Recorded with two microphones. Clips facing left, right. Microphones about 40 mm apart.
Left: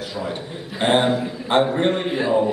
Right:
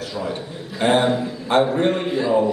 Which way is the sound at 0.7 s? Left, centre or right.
Left.